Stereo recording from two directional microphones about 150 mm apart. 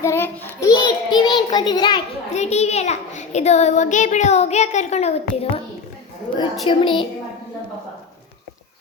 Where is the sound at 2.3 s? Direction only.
45° left (ahead or behind).